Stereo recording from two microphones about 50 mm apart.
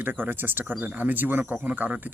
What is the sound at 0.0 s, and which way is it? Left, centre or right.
Speech, right.